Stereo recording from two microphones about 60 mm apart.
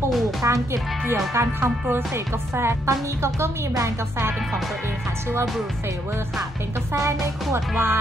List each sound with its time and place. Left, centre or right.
0.4 s music: right
6.9 s speech: right
7.7 s speech: right